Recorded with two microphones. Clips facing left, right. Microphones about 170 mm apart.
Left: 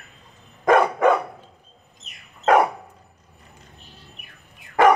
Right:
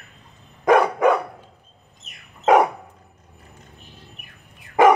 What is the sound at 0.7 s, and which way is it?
Dog, 10° right (ahead or behind).